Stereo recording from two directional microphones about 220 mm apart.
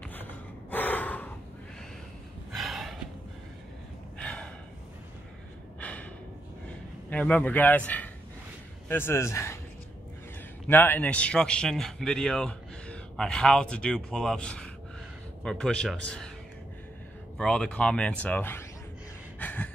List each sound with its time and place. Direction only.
0.1 s gasp: 10° left (ahead or behind)
2.5 s snort: centre (ahead or behind)
4.2 s gasp: 5° left (ahead or behind)
5.8 s gasp: 5° left (ahead or behind)
7.1 s speech: 5° left (ahead or behind)
10.7 s a man's voice: 10° left (ahead or behind)
17.4 s a man's voice: 5° left (ahead or behind)
19.4 s a sound: 10° left (ahead or behind)